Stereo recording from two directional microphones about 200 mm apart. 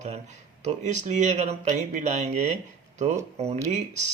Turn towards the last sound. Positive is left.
turn(degrees=-35)  # may be behind; listen again after turning